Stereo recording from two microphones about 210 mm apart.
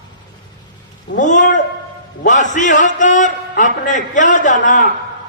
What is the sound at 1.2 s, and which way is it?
A man's voice, 35° left (ahead or behind).